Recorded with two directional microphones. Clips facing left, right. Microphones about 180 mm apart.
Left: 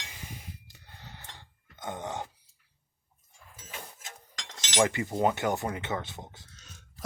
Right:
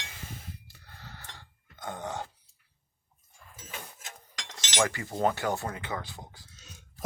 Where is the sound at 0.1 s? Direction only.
15° left (ahead or behind).